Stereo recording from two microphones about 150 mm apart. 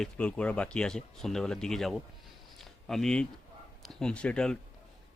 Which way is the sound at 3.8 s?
5° left (ahead or behind).